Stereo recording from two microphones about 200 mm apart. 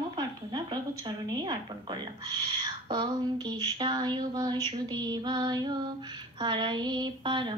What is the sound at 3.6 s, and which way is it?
Speech, 25° right (ahead or behind).